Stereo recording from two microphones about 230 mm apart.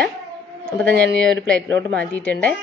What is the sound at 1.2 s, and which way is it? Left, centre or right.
A woman's voice, centre.